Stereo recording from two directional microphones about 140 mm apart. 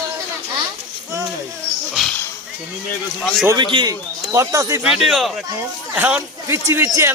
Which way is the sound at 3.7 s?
40° right (ahead or behind).